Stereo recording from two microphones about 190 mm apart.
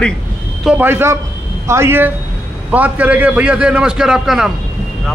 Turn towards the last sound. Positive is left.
turn(degrees=0)  # may be behind; listen again after turning